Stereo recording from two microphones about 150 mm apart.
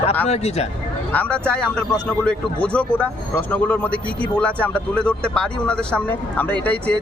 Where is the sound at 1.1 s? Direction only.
10° left (ahead or behind).